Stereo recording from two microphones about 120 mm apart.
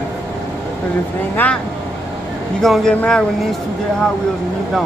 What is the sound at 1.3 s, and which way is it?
Speech, 10° left (ahead or behind).